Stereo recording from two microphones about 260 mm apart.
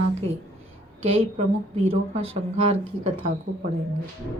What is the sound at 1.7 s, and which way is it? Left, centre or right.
A woman's voice, right.